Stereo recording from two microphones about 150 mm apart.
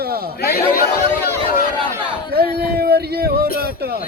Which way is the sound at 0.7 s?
90° left.